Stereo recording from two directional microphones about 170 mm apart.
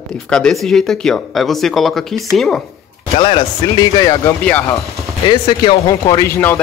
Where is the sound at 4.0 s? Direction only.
20° left (ahead or behind).